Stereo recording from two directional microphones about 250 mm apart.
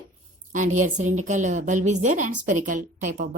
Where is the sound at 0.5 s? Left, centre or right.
Right.